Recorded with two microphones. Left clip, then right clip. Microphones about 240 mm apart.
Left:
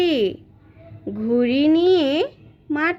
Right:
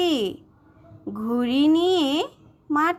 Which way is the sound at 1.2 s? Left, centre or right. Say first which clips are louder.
Left 4 dB; right.